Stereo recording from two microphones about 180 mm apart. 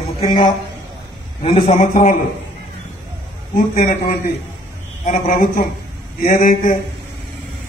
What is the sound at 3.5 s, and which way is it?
Speech, 45° left (ahead or behind).